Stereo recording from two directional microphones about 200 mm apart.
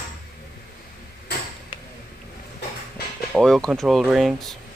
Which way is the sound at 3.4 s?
Centre (ahead or behind).